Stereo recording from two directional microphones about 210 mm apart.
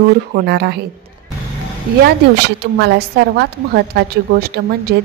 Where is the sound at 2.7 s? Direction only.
50° right (ahead or behind).